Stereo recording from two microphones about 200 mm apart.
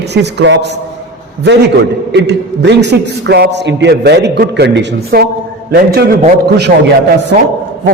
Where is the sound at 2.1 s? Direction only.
60° right (ahead or behind).